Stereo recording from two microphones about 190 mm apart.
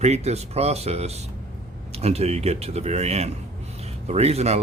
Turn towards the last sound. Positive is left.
turn(degrees=-35)  # may be behind; listen again after turning